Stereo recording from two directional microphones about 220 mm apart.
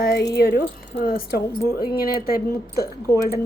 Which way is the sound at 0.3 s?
45° left (ahead or behind).